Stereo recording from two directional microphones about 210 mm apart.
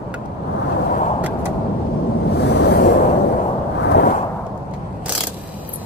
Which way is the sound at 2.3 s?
50° left (ahead or behind).